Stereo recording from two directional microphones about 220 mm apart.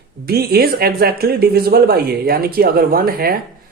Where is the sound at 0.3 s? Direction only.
45° right (ahead or behind).